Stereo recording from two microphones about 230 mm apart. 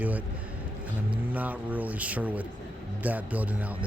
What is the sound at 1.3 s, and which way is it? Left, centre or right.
A man's voice, centre.